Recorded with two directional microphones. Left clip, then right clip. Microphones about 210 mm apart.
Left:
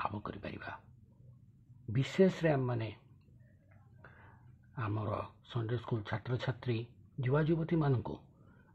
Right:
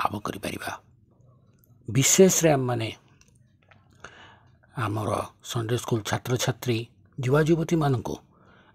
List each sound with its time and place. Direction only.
0.0 s speech: 35° right (ahead or behind)
1.9 s speech: 40° right (ahead or behind)
4.7 s speech: 35° right (ahead or behind)